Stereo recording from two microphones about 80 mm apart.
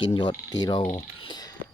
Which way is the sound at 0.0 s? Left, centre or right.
Left.